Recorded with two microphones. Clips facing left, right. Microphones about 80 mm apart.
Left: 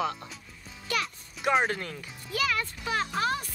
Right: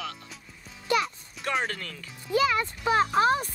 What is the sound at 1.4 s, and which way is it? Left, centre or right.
Speech, centre.